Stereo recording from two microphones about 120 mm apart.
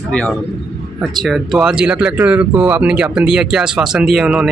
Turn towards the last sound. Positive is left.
turn(degrees=-5)  # may be behind; listen again after turning